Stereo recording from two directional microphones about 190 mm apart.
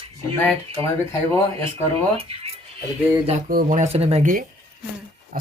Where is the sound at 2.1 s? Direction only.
30° right (ahead or behind).